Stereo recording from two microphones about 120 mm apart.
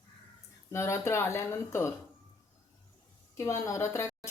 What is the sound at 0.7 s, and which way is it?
A woman's voice, 25° left (ahead or behind).